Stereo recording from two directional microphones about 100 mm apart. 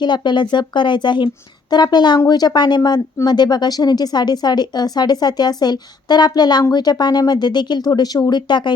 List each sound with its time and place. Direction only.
0.0 s speech: 50° left (ahead or behind)